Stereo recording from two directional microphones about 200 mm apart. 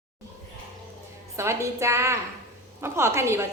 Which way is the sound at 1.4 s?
15° right (ahead or behind).